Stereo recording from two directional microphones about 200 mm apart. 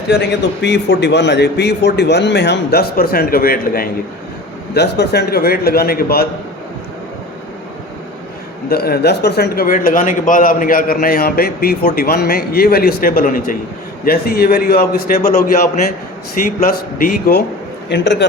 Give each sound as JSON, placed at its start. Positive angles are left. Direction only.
{"t": 0.1, "sound": "a man's voice", "side_deg": 55}
{"t": 8.7, "sound": "a man's voice", "side_deg": 50}
{"t": 17.8, "sound": "a man's voice", "side_deg": 60}